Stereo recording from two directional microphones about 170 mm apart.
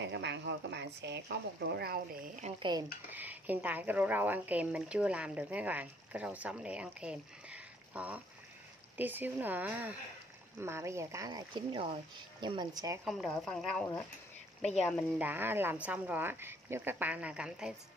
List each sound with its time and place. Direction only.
0.0 s speech: 90° right; by 2.3 s 65° right (ahead or behind)
3.1 s speech: 10° right (ahead or behind)
13.0 s speech: centre (ahead or behind)
14.6 s speech: 40° left (ahead or behind)
15.1 s speech: 10° right (ahead or behind)